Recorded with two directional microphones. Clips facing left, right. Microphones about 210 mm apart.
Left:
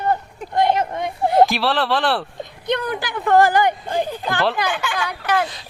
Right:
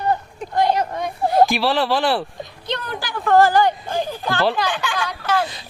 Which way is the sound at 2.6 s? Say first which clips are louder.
Left 5 dB; 20° left (ahead or behind).